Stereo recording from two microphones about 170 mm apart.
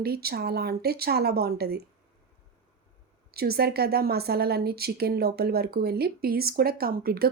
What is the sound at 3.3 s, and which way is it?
Speech, 65° right (ahead or behind).